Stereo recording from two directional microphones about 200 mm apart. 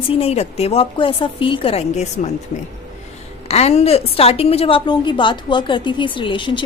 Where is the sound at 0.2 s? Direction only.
30° left (ahead or behind).